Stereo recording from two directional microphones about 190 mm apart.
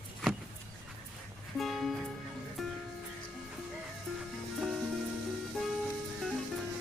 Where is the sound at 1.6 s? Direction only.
Centre (ahead or behind).